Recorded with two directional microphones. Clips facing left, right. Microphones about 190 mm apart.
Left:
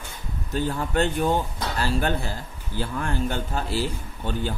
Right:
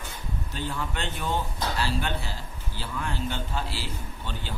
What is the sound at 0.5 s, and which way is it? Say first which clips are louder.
Speech: left 8 dB; 45° left (ahead or behind).